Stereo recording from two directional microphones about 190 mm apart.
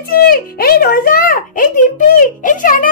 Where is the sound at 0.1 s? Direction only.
50° left (ahead or behind).